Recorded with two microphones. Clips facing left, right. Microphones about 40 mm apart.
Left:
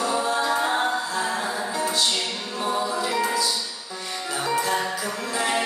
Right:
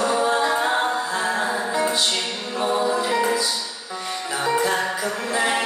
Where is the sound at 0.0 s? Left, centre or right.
Right.